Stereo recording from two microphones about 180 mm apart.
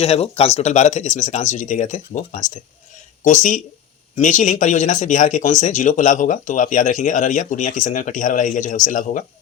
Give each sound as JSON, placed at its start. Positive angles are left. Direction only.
{"t": 0.0, "sound": "speech", "side_deg": 35}